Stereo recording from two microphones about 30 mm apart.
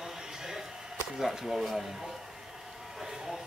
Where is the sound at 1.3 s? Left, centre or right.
Centre.